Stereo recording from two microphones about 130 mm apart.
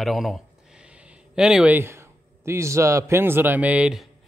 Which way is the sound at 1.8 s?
20° right (ahead or behind).